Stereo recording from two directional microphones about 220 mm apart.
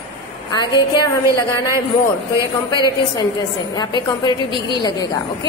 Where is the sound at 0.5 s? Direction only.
20° left (ahead or behind).